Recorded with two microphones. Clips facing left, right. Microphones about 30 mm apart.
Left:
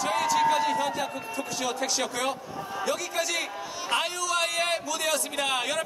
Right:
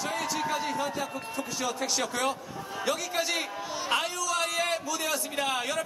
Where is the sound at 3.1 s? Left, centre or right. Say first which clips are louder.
Even; right.